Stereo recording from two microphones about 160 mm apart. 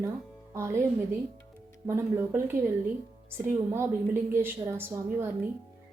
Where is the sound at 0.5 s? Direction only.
15° right (ahead or behind).